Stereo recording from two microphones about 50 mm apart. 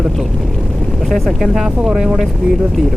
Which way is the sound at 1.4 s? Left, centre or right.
Centre.